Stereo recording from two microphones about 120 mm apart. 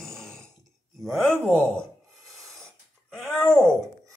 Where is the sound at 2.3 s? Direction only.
Centre (ahead or behind).